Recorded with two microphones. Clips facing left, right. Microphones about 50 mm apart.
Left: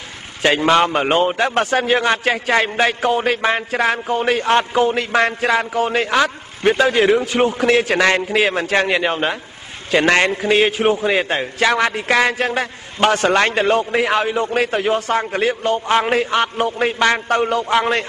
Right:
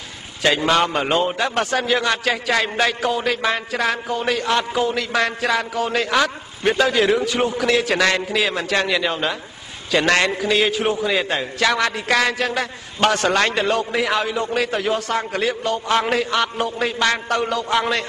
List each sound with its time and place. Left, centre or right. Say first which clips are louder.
0.6 s a man's voice: left 3 dB; left